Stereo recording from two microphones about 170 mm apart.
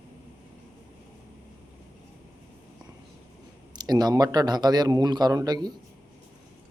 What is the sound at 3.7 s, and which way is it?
A man's voice, 25° right (ahead or behind).